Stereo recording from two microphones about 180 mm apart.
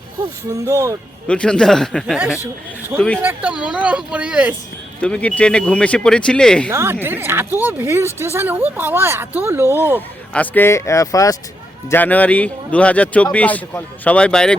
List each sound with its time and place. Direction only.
0.5 s speech: 15° right (ahead or behind)
1.3 s speech: 5° left (ahead or behind)
3.2 s speech: 10° right (ahead or behind)
4.9 s speech: 5° left (ahead or behind)
6.7 s speech: 15° right (ahead or behind)
10.3 s speech: 10° left (ahead or behind)